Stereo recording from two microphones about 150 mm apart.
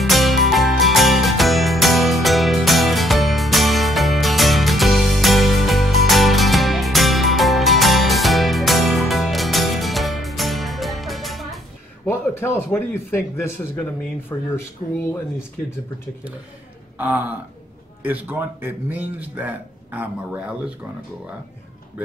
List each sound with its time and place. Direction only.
0.0 s music: centre (ahead or behind)
12.1 s a man's voice: 15° left (ahead or behind)
14.8 s speech: 50° left (ahead or behind)
18.0 s speech: 10° right (ahead or behind)